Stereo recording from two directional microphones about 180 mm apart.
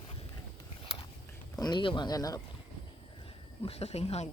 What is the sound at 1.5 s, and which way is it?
Speech, 25° left (ahead or behind).